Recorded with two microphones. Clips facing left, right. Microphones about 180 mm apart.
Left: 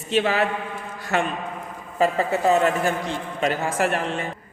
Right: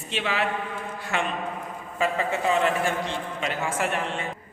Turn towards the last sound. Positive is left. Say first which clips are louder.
# left 5 dB
turn(degrees=40)  # may be behind; listen again after turning